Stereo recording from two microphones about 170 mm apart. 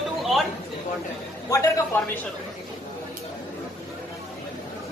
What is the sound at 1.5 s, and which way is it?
Speech, 20° left (ahead or behind).